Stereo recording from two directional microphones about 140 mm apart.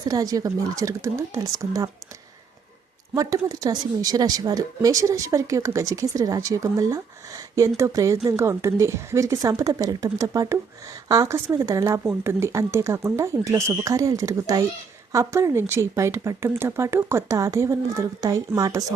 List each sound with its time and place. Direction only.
0.1 s a woman's voice: 25° right (ahead or behind)
3.2 s a woman's voice: 25° right (ahead or behind)